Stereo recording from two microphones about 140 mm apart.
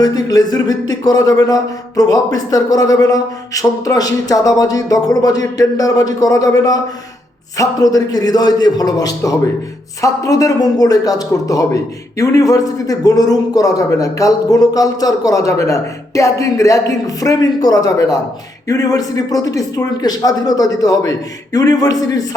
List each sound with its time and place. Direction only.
0.0 s a man's voice: 30° left (ahead or behind)